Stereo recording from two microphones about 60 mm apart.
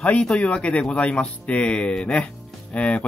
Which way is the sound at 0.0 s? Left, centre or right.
Centre.